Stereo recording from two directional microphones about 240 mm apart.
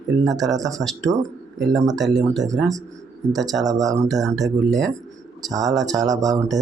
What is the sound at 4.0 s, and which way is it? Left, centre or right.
Speech, centre.